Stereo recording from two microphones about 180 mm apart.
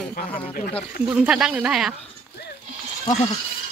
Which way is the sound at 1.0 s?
5° right (ahead or behind).